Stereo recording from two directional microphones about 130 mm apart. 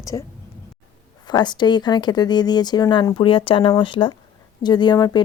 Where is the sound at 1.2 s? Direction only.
35° left (ahead or behind).